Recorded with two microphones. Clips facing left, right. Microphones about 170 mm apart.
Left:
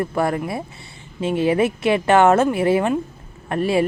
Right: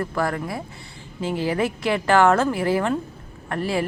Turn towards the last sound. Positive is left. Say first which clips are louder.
# left 5 dB
turn(degrees=25)  # may be behind; listen again after turning